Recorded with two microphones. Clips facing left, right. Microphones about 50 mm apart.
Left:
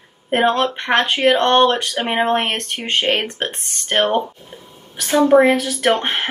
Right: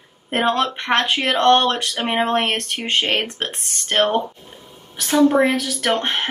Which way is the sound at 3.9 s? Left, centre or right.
Left.